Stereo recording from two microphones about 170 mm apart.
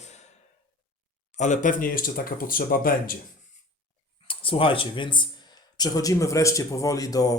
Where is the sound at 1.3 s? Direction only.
45° left (ahead or behind).